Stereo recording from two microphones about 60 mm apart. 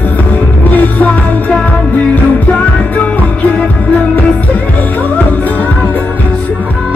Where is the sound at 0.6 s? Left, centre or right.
Left.